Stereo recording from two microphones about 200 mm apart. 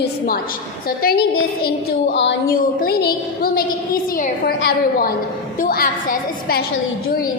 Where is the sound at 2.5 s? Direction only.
50° left (ahead or behind).